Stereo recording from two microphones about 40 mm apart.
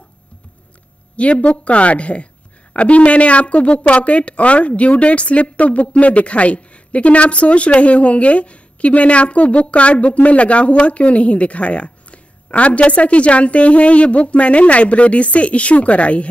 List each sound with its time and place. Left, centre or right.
1.1 s a woman's voice: left